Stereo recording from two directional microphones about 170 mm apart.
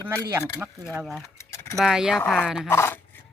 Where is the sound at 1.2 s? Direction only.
15° left (ahead or behind).